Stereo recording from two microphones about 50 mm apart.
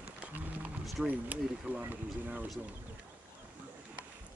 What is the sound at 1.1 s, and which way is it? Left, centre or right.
Speech, right.